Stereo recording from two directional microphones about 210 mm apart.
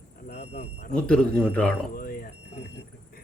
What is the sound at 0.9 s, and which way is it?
Speech, 5° left (ahead or behind).